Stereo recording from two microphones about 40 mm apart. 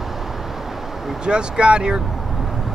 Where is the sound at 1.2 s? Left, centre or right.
Right.